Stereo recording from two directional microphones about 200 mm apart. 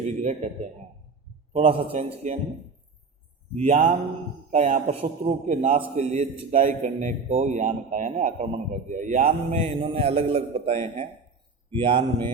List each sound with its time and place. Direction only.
0.0 s a man's voice: 35° right (ahead or behind)
3.5 s a man's voice: 30° right (ahead or behind)